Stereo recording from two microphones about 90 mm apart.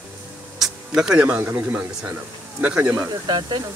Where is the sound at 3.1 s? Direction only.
50° right (ahead or behind).